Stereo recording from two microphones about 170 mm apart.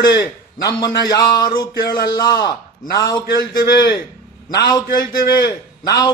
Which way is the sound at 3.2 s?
70° left (ahead or behind).